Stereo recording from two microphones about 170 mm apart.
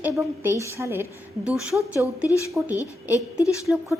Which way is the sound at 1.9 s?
15° right (ahead or behind).